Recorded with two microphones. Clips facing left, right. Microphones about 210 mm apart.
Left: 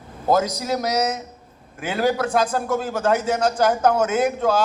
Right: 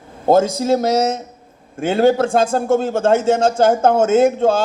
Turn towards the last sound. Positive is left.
turn(degrees=-25)  # may be behind; listen again after turning